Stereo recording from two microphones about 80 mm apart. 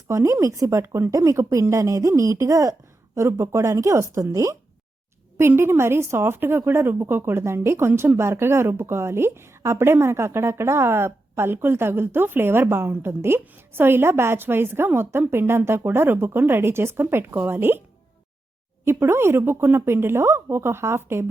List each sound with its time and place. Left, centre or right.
0.1 s a woman's voice: right
5.4 s a woman's voice: right
18.9 s a woman's voice: right